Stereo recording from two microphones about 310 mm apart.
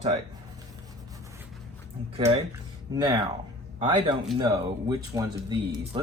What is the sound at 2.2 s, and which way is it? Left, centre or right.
A man's voice, right.